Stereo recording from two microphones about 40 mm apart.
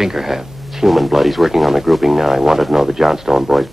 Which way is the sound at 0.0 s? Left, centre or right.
Centre.